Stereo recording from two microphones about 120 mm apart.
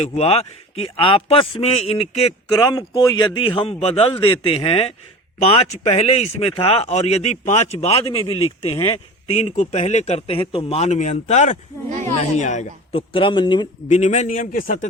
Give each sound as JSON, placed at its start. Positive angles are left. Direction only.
{"t": 0.0, "sound": "speech", "side_deg": 60}
{"t": 2.6, "sound": "a man's voice", "side_deg": 30}
{"t": 12.9, "sound": "a man's voice", "side_deg": 50}
{"t": 13.8, "sound": "a man's voice", "side_deg": 75}